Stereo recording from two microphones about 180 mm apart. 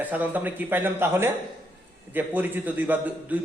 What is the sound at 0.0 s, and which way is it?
A man's voice, 10° right (ahead or behind).